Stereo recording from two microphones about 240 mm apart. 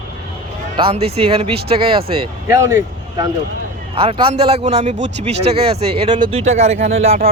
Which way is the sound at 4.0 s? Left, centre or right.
Right.